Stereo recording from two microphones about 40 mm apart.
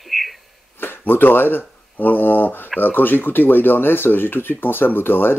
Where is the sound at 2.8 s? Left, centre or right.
Left.